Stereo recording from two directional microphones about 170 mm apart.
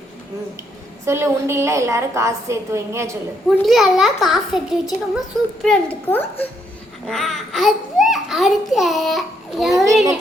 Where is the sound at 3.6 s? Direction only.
Centre (ahead or behind).